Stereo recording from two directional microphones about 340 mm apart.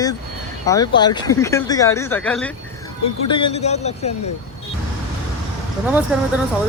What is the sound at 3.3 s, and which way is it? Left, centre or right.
Speech, centre.